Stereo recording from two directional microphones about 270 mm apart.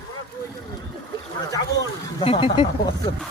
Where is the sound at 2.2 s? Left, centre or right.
Centre.